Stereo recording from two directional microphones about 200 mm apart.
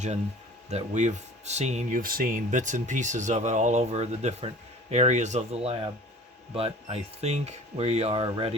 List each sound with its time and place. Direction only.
0.7 s speech: 35° right (ahead or behind)